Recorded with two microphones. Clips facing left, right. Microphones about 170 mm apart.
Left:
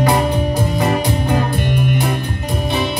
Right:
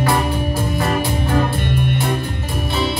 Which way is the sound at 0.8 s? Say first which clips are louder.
Left 2 dB; 20° left (ahead or behind).